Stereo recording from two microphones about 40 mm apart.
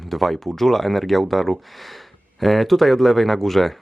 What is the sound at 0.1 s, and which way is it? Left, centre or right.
Speech, centre.